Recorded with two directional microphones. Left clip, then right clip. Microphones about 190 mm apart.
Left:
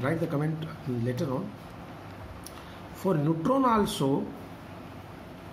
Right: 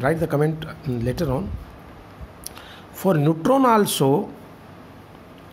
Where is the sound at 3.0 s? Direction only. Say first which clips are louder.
Right 8 dB; 55° right (ahead or behind).